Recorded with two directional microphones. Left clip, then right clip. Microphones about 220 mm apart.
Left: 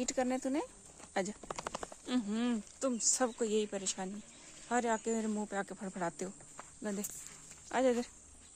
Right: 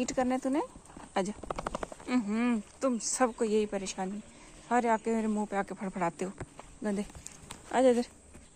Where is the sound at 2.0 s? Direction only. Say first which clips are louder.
Right 5 dB; 10° left (ahead or behind).